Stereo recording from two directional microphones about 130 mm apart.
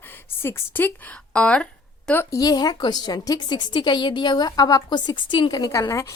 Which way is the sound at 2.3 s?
30° left (ahead or behind).